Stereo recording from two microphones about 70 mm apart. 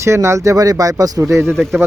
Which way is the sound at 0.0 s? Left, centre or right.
Right.